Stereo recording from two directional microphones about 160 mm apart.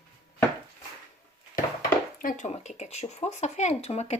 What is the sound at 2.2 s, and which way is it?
Speech, 55° left (ahead or behind).